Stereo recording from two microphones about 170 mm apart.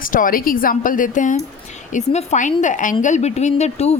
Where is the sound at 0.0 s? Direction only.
55° left (ahead or behind).